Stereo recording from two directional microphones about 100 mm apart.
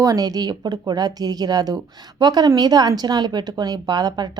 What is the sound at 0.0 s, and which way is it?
A woman's voice, 35° right (ahead or behind).